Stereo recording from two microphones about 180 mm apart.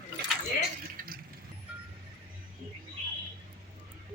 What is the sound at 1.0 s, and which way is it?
Vehicle, 50° right (ahead or behind).